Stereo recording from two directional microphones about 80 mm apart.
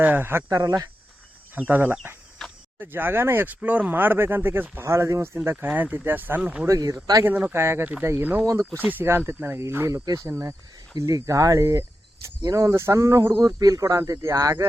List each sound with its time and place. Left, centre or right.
0.0 s speech: right
0.5 s speech: right
1.5 s speech: right
2.4 s cricket: centre
2.7 s speech: right
5.5 s speech: right
6.7 s speech: right
7.3 s speech: centre
7.5 s speech: right
10.9 s speech: right